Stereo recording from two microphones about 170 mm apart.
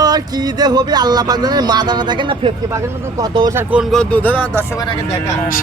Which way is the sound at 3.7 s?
Centre (ahead or behind).